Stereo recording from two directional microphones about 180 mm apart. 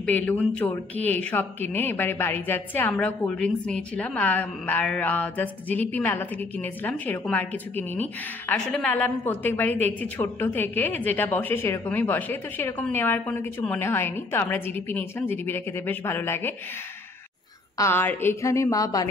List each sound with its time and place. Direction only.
0.0 s speech: 10° left (ahead or behind)
17.7 s speech: 15° left (ahead or behind)